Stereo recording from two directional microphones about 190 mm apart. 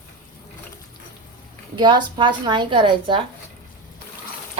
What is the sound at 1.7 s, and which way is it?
A woman's voice, 25° right (ahead or behind).